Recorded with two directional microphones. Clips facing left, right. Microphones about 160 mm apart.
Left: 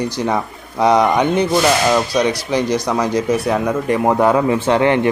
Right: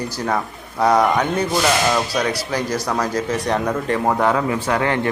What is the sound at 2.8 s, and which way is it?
A man's voice, 15° left (ahead or behind).